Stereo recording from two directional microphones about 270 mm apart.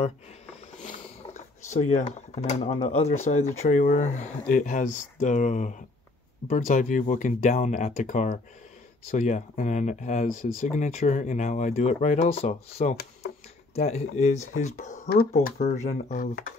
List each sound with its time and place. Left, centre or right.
0.7 s speech: left